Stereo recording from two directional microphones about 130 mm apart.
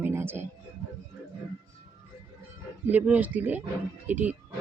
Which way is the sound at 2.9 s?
10° right (ahead or behind).